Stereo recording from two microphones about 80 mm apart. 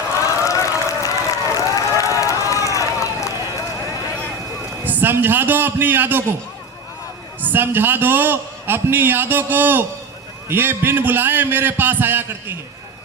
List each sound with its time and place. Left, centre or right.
0.4 s run: left
4.9 s a man's voice: right
7.4 s a man's voice: right